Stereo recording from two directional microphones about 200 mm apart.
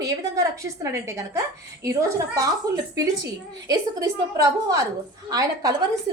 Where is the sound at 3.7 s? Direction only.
15° right (ahead or behind).